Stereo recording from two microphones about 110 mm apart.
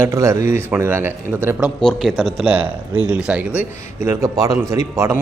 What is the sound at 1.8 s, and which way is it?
Speech, centre (ahead or behind).